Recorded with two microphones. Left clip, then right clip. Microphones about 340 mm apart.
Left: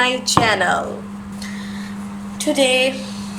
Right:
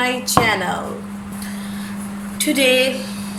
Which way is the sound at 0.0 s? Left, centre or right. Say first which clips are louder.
Left 1 dB; left.